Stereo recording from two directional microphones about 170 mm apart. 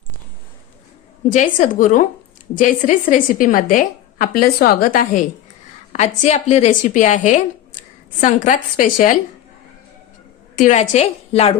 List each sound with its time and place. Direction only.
1.3 s a woman's voice: 50° left (ahead or behind)
5.9 s a woman's voice: 40° left (ahead or behind)
10.5 s a woman's voice: 45° left (ahead or behind)